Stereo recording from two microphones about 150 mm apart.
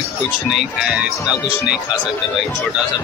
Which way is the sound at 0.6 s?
5° right (ahead or behind).